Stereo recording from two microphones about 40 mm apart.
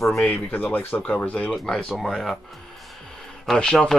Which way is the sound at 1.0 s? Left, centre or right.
Left.